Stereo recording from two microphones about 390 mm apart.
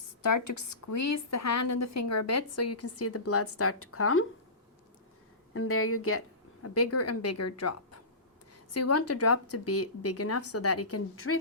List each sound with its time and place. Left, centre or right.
0.2 s a woman's voice: left
5.5 s a woman's voice: left